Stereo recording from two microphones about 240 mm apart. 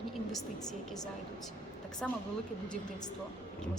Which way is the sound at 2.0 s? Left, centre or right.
Centre.